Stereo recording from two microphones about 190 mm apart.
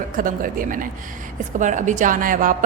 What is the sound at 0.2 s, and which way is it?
A woman's voice, 45° right (ahead or behind).